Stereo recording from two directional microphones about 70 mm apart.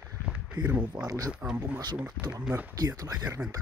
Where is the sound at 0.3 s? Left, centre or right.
Centre.